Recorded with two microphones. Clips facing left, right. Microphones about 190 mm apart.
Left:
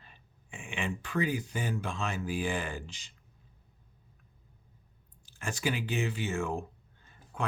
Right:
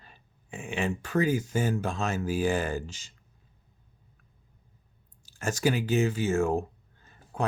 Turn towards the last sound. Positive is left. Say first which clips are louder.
# right 5 dB
turn(degrees=-40)  # may be behind; listen again after turning